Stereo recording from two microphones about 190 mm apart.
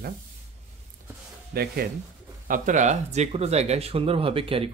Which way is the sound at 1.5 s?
55° right (ahead or behind).